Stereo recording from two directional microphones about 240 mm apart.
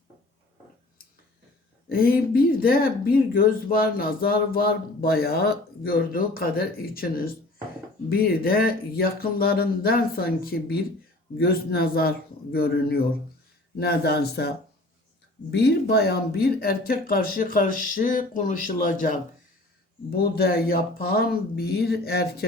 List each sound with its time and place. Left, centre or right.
1.9 s speech: left